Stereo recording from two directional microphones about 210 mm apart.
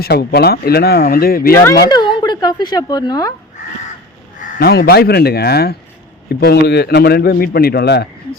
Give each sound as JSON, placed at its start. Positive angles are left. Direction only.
{"t": 0.0, "sound": "a man's voice", "side_deg": 50}
{"t": 1.9, "sound": "speech", "side_deg": 20}
{"t": 4.4, "sound": "crow", "side_deg": 35}
{"t": 4.7, "sound": "a man's voice", "side_deg": 50}